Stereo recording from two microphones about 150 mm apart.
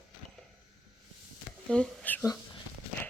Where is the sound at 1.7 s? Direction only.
5° left (ahead or behind).